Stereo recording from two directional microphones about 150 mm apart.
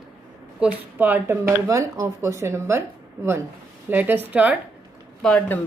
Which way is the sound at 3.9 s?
10° right (ahead or behind).